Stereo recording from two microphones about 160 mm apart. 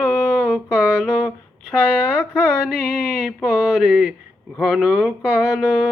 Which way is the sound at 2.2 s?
5° left (ahead or behind).